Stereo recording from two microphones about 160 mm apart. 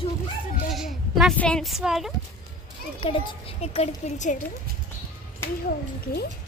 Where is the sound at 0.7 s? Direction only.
Centre (ahead or behind).